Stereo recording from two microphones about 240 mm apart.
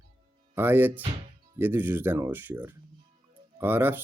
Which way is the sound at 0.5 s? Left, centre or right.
Centre.